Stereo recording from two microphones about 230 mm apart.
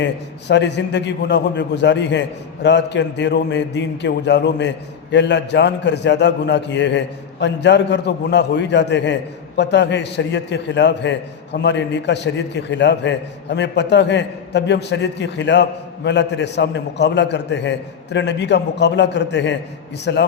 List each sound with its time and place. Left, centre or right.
0.0 s a man's voice: left